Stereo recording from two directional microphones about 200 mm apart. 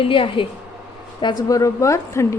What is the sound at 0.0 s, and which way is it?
A woman's voice, 25° left (ahead or behind).